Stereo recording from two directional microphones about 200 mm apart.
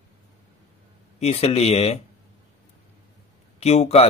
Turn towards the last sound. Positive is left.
turn(degrees=30)  # may be behind; listen again after turning